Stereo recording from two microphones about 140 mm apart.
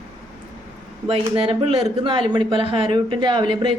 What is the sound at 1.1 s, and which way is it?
Speech, 40° right (ahead or behind).